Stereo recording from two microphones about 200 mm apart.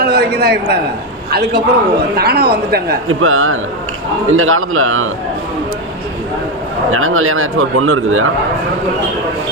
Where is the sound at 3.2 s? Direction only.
90° right.